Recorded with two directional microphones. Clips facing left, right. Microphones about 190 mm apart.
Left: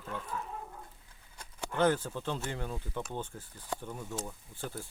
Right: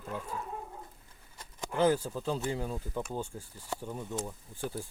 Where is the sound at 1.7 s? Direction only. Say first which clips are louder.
Right 1 dB; 10° right (ahead or behind).